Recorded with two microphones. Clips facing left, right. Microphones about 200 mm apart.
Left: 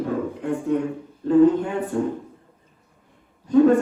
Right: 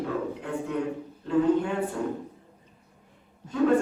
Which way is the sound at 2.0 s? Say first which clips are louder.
Left 6 dB; 40° left (ahead or behind).